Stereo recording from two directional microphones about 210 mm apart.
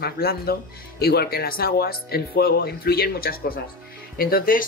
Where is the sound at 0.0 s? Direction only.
45° left (ahead or behind).